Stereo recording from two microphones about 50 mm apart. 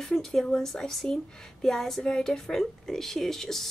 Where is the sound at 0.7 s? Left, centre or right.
Centre.